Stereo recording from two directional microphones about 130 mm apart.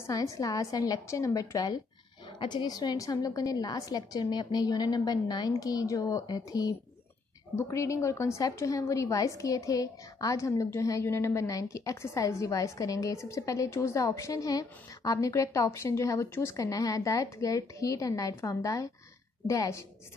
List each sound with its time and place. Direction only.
0.0 s a woman's voice: 25° left (ahead or behind)